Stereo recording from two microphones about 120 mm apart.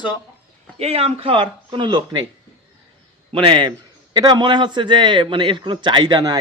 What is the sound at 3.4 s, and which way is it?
A man's voice, 40° right (ahead or behind).